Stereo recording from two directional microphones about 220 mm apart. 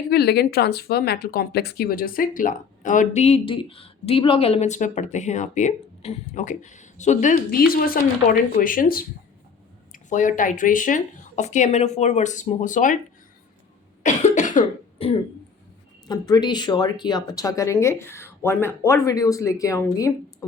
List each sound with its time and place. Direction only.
0.1 s speech: 45° left (ahead or behind)
14.0 s cough: 30° left (ahead or behind)
16.0 s speech: 20° left (ahead or behind)